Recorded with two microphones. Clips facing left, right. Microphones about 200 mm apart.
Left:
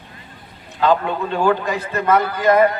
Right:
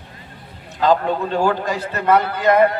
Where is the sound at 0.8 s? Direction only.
35° right (ahead or behind).